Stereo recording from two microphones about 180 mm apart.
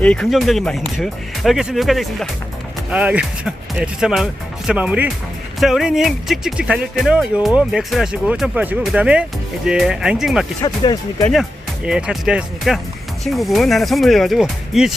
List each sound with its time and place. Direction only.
0.0 s speech: 5° left (ahead or behind)
10.6 s speech: 20° left (ahead or behind)
11.9 s speech: 5° right (ahead or behind)